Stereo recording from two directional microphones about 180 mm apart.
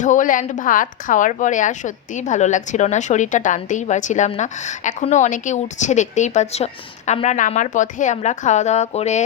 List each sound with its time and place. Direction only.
0.0 s a woman's voice: 45° left (ahead or behind)